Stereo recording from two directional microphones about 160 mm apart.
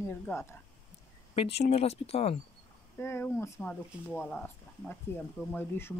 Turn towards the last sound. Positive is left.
turn(degrees=15)  # may be behind; listen again after turning